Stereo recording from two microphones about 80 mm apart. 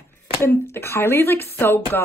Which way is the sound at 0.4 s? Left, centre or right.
Left.